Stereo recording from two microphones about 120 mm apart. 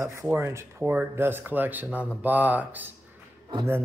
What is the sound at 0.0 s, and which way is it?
Speech, 25° right (ahead or behind).